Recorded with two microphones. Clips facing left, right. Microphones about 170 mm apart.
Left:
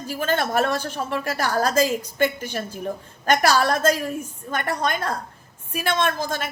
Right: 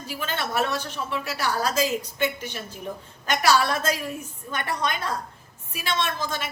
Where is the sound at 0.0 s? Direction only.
45° left (ahead or behind).